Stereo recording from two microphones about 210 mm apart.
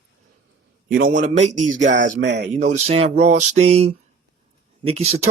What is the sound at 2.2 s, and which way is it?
Speech, 55° right (ahead or behind).